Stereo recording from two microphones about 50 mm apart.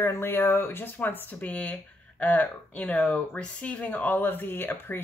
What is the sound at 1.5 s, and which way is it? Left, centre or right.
Speech, left.